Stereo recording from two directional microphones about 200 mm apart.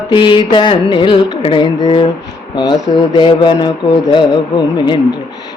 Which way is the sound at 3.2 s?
25° left (ahead or behind).